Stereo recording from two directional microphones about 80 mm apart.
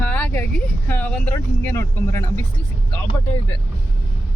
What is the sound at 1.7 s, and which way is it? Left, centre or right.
Speech, left.